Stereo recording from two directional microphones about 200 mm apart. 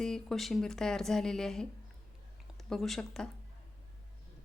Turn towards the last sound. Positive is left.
turn(degrees=0)  # may be behind; listen again after turning